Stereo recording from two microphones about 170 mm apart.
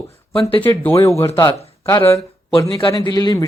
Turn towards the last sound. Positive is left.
turn(degrees=20)  # may be behind; listen again after turning